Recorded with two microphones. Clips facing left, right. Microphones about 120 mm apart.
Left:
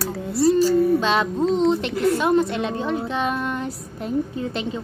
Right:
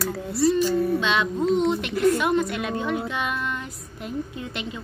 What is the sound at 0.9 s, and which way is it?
A woman's voice, 40° left (ahead or behind).